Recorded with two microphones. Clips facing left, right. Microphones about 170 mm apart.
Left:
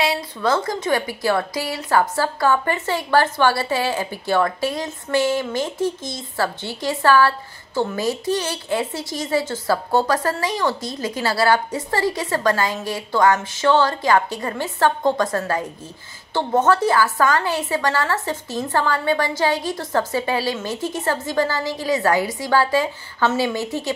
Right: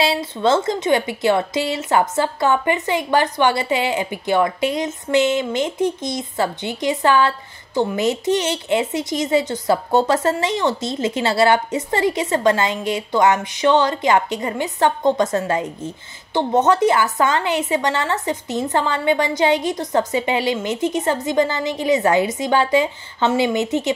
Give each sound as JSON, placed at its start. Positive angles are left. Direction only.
{"t": 0.0, "sound": "a woman's voice", "side_deg": -25}